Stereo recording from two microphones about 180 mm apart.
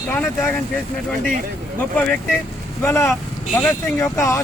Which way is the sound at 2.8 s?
15° left (ahead or behind).